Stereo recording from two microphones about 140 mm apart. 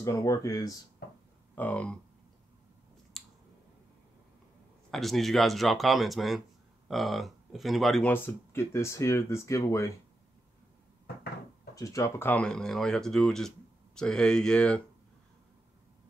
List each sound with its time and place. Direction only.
0.0 s speech: 20° left (ahead or behind)
1.5 s a sound: 10° left (ahead or behind)
3.1 s scissors: centre (ahead or behind)
4.9 s speech: centre (ahead or behind)
8.1 s speech: 20° left (ahead or behind)
11.7 s speech: 20° left (ahead or behind); by 14.8 s 5° left (ahead or behind)